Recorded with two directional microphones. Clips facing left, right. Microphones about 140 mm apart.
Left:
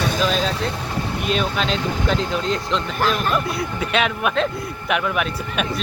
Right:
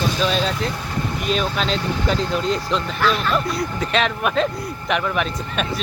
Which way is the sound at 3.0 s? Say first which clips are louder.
Even; 45° left (ahead or behind).